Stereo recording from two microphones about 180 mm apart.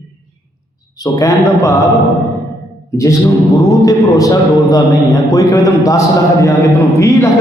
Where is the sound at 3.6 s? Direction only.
20° left (ahead or behind).